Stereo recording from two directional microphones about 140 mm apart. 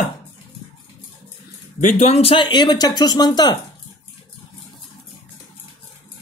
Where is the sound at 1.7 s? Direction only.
60° left (ahead or behind); by 3.5 s 30° left (ahead or behind).